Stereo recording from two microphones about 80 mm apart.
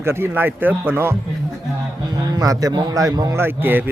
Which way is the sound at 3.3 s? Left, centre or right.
Right.